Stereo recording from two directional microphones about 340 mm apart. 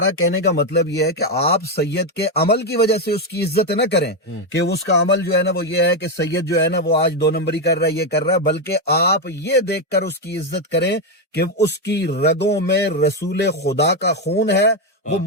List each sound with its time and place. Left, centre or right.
0.0 s speech: left